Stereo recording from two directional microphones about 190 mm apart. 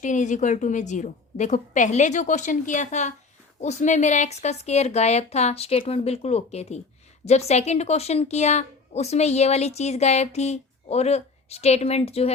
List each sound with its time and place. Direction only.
0.0 s a woman's voice: 40° left (ahead or behind)